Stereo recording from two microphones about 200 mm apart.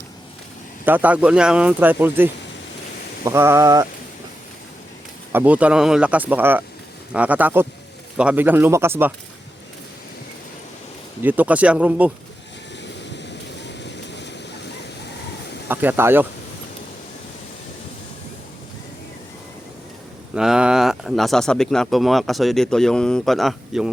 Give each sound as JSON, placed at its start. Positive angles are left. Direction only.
{"t": 0.9, "sound": "speech", "side_deg": -10}
{"t": 5.3, "sound": "speech", "side_deg": -10}
{"t": 11.2, "sound": "speech", "side_deg": -10}
{"t": 12.8, "sound": "vehicle", "side_deg": 60}
{"t": 15.7, "sound": "speech", "side_deg": -10}
{"t": 20.3, "sound": "speech", "side_deg": -5}